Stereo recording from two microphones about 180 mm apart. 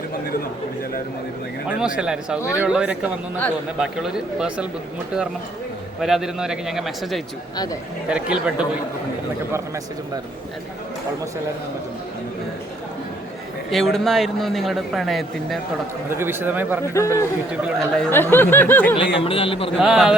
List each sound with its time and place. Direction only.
2.0 s a man's voice: 5° right (ahead or behind)
6.0 s a man's voice: centre (ahead or behind)
13.7 s a man's voice: centre (ahead or behind)
16.0 s speech: 10° right (ahead or behind)
16.8 s speech: 15° left (ahead or behind)
17.7 s speech: 5° left (ahead or behind)
19.1 s a man's voice: 30° left (ahead or behind)
19.8 s a man's voice: 5° right (ahead or behind)